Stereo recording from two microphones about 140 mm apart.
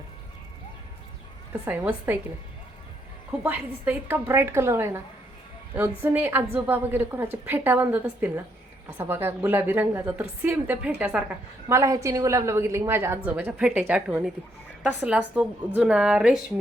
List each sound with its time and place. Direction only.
1.6 s a woman's voice: 10° right (ahead or behind)
3.3 s a woman's voice: 5° right (ahead or behind)